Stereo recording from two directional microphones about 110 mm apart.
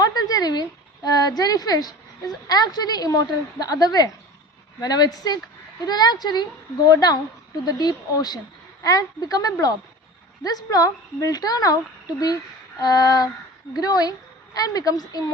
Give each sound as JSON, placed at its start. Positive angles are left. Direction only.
{"t": 0.0, "sound": "a sound", "side_deg": 35}
{"t": 1.4, "sound": "a woman's voice", "side_deg": 35}
{"t": 12.8, "sound": "a woman's voice", "side_deg": 35}